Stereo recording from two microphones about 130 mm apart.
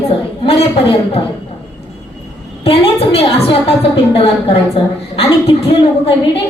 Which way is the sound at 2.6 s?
50° left (ahead or behind).